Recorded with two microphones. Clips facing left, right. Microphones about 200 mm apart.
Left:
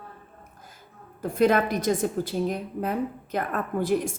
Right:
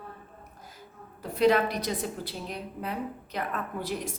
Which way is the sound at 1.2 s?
50° left (ahead or behind).